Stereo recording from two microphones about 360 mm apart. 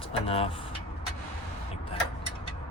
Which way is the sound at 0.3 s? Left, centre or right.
Centre.